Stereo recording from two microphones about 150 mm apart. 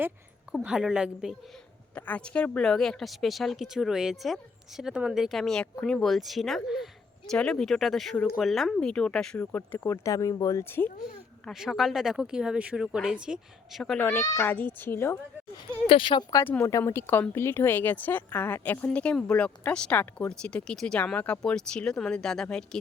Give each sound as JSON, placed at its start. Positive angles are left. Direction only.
{"t": 0.5, "sound": "speech", "side_deg": -5}
{"t": 2.0, "sound": "a woman's voice", "side_deg": 10}
{"t": 10.8, "sound": "speech", "side_deg": 55}
{"t": 11.4, "sound": "speech", "side_deg": 0}
{"t": 14.0, "sound": "a child's voice", "side_deg": 20}
{"t": 14.4, "sound": "a woman's voice", "side_deg": 10}
{"t": 15.9, "sound": "speech", "side_deg": 35}
{"t": 16.3, "sound": "a woman's voice", "side_deg": 15}